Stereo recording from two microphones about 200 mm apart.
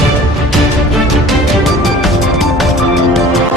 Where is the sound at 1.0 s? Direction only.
Centre (ahead or behind).